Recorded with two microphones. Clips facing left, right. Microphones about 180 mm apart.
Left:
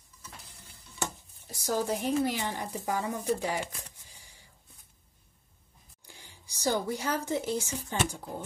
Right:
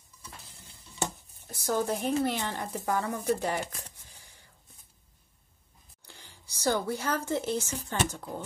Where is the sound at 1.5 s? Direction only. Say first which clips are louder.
Right 1 dB; 60° right (ahead or behind).